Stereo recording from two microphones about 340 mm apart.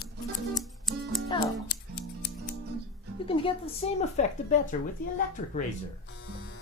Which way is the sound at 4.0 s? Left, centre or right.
Left.